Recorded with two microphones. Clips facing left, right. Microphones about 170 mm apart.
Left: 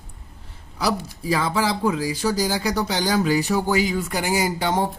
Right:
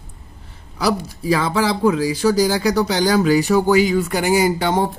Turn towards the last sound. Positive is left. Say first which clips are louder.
# right 5 dB
turn(degrees=-60)  # may be behind; listen again after turning